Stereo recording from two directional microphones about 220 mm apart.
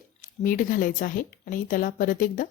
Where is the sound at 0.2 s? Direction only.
40° left (ahead or behind).